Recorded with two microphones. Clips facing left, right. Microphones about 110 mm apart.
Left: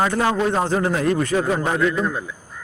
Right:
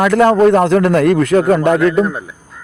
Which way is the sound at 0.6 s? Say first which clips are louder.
Right 9 dB; 70° right (ahead or behind).